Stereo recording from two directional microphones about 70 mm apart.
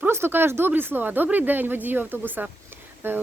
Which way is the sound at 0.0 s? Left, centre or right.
Right.